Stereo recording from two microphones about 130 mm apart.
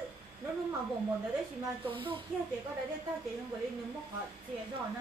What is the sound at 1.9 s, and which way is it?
Speech, 40° right (ahead or behind).